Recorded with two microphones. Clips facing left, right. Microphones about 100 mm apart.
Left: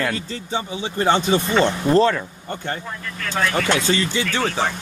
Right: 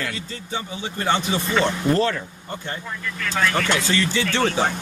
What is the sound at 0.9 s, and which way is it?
Speech, 30° left (ahead or behind).